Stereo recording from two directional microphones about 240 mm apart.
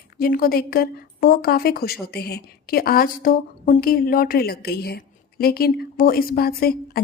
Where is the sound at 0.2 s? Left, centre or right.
Left.